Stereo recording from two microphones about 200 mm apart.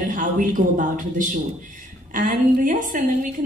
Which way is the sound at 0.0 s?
40° right (ahead or behind).